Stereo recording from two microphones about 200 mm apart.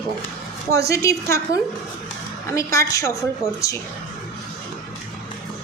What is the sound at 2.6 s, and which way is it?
Speech, 15° left (ahead or behind).